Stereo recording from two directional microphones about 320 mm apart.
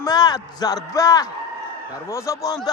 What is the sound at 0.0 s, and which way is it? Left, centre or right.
A man's voice, centre.